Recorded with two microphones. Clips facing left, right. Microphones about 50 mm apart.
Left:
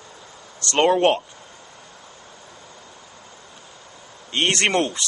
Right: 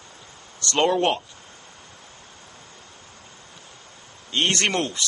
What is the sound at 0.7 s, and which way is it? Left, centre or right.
Speech, left.